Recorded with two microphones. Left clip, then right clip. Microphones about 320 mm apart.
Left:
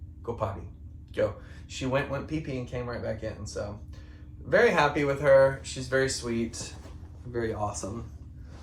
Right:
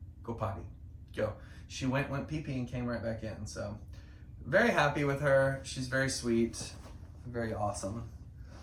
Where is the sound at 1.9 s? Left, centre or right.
Centre.